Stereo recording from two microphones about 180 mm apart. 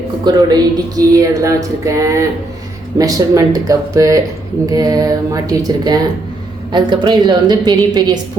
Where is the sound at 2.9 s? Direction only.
20° right (ahead or behind).